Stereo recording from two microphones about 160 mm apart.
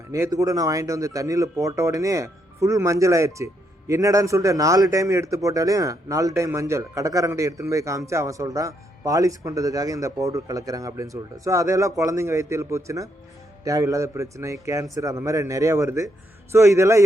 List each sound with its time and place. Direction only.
0.1 s speech: 20° right (ahead or behind)